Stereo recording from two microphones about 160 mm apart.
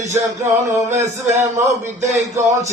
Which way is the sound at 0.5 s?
15° right (ahead or behind).